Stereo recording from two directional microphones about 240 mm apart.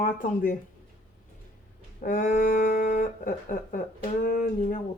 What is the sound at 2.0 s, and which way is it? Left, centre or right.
Speech, left.